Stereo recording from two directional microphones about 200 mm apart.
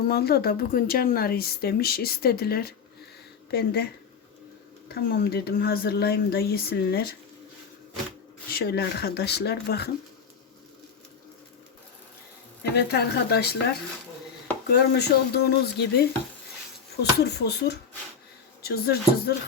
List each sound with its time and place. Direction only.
0.1 s a woman's voice: 50° left (ahead or behind)
4.9 s a woman's voice: 50° left (ahead or behind)
8.5 s a woman's voice: 50° left (ahead or behind)
12.7 s a woman's voice: 55° left (ahead or behind)
14.7 s a woman's voice: 55° left (ahead or behind)